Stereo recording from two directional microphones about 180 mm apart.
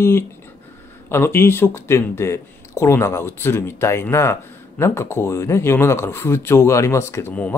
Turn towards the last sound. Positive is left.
turn(degrees=10)  # may be behind; listen again after turning